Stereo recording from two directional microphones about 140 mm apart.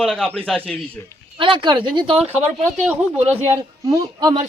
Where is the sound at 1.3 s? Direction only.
35° right (ahead or behind).